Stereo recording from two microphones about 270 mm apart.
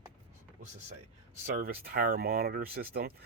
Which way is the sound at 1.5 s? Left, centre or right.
Right.